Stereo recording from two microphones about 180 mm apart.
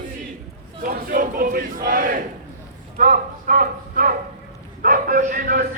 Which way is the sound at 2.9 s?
50° right (ahead or behind).